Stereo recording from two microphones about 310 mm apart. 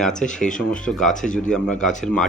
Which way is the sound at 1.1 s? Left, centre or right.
Left.